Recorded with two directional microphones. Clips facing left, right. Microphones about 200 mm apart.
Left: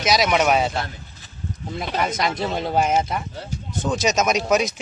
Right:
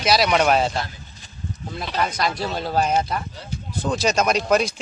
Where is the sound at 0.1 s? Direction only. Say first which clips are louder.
Right 1 dB; centre (ahead or behind).